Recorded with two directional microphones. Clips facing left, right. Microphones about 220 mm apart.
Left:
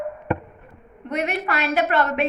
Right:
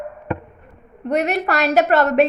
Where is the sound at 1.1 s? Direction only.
40° right (ahead or behind).